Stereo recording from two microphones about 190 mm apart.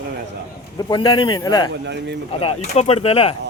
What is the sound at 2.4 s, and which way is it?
Speech, 35° left (ahead or behind).